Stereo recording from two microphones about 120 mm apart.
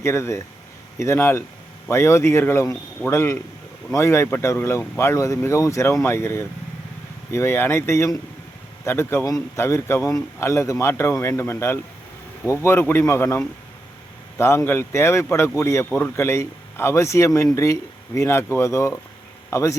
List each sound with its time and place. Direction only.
0.0 s speech: 25° left (ahead or behind)